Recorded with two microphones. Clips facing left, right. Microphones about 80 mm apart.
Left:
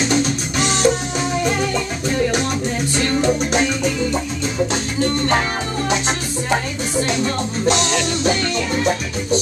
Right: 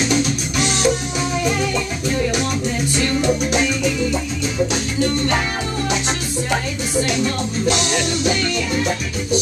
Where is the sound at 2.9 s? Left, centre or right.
Left.